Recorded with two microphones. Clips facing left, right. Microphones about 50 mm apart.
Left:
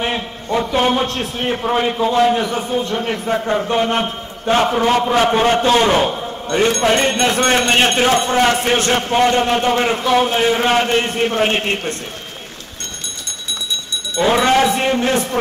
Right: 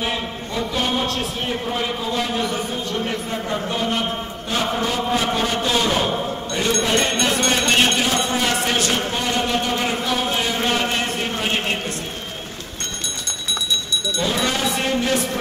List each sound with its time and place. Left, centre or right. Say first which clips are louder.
0.0 s a man's voice: left 3 dB; left
3.3 s a man's voice: left 7 dB; left
14.2 s a man's voice: left 10 dB; left
14.8 s a man's voice: left 4 dB; left